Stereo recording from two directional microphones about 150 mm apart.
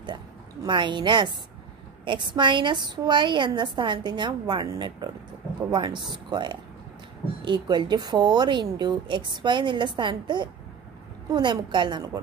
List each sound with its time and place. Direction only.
0.7 s a woman's voice: 30° right (ahead or behind)